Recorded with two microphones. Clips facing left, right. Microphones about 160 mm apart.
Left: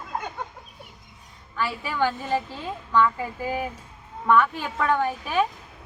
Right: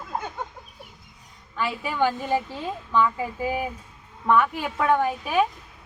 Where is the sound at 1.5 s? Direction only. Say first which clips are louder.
Right 1 dB; 15° right (ahead or behind).